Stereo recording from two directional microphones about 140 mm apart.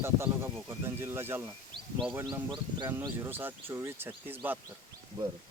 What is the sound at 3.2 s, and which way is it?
Speech, 15° right (ahead or behind).